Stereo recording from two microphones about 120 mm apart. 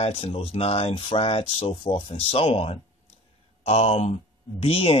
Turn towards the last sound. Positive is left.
turn(degrees=55)  # may be behind; listen again after turning